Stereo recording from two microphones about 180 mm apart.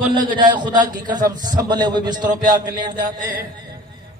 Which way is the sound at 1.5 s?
25° right (ahead or behind).